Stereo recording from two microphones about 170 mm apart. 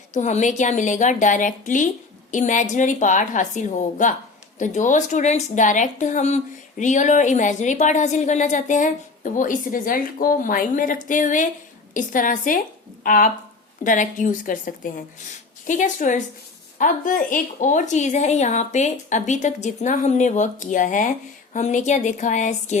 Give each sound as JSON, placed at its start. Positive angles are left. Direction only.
{"t": 0.1, "sound": "a woman's voice", "side_deg": 45}